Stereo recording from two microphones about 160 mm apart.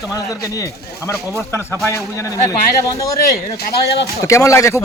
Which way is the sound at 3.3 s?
85° left.